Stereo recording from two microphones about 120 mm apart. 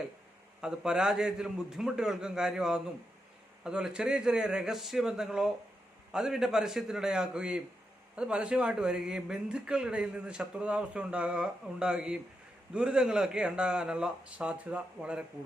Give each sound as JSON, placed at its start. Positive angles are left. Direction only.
{"t": 0.6, "sound": "a man's voice", "side_deg": -5}